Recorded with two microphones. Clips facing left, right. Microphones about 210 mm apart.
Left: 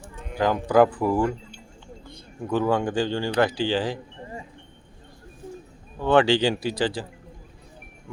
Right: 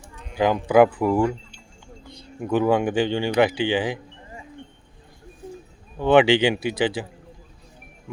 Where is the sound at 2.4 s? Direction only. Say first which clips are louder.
Right 3 dB; 15° right (ahead or behind).